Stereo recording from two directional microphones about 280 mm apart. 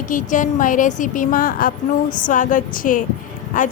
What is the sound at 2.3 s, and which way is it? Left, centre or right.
Speech, left.